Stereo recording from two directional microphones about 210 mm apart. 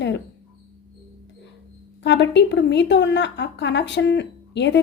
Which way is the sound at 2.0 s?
55° left (ahead or behind).